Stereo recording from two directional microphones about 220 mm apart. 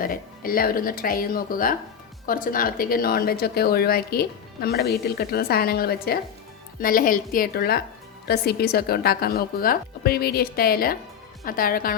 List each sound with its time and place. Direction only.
0.0 s a woman's voice: 40° left (ahead or behind)